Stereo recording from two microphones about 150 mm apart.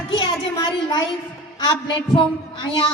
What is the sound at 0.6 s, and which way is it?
Speech, 30° left (ahead or behind).